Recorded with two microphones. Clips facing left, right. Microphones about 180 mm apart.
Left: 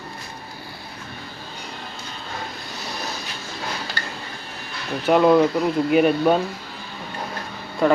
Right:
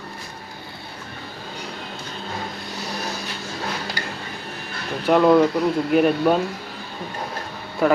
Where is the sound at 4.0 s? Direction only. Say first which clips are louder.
Right 2 dB; 10° right (ahead or behind).